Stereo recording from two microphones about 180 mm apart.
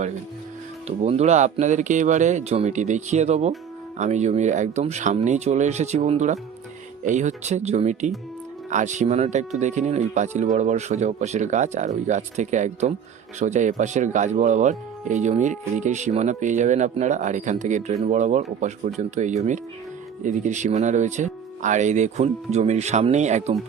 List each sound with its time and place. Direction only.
0.9 s speech: 35° right (ahead or behind)